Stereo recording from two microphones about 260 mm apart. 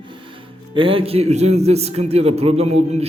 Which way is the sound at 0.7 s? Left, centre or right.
Centre.